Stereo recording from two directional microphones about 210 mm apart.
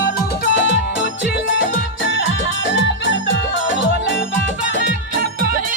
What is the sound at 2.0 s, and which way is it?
Music, 60° left (ahead or behind).